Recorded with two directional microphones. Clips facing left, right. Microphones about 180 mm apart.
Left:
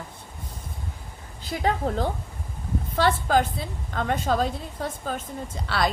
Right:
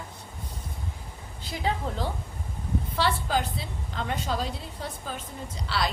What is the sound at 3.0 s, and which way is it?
A woman's voice, 50° left (ahead or behind).